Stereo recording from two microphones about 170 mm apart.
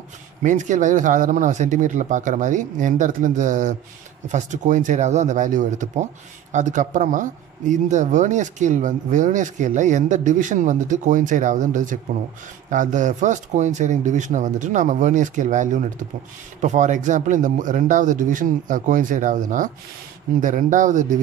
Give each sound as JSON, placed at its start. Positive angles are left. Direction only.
{"t": 0.4, "sound": "speech", "side_deg": -45}